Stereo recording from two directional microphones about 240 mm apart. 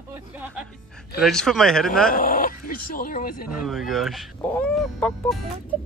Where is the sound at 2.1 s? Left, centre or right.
Left.